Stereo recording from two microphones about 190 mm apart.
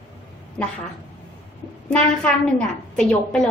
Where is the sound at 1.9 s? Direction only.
5° left (ahead or behind).